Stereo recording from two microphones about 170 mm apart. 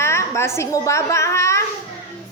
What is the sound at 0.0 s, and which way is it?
A woman's voice, 15° left (ahead or behind).